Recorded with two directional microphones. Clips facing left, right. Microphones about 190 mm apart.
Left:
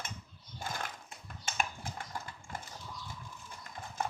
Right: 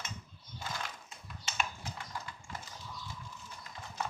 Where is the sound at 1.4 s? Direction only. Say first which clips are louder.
Left 2 dB; 50° left (ahead or behind).